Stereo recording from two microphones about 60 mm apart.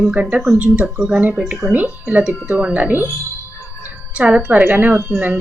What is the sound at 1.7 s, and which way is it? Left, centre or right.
Speech, right.